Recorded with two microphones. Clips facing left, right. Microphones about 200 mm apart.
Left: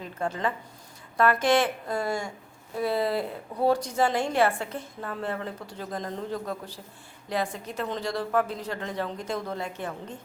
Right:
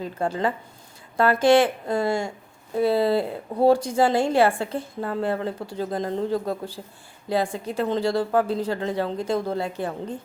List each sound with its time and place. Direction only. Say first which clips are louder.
0.0 s a woman's voice: right 5 dB; 30° right (ahead or behind)